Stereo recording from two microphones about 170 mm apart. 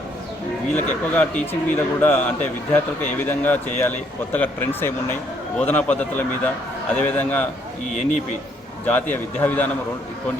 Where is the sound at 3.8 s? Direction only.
10° left (ahead or behind).